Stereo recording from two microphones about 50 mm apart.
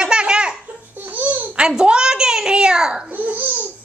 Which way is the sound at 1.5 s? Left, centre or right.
Centre.